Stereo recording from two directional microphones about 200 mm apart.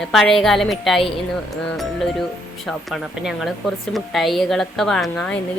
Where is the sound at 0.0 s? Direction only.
Centre (ahead or behind).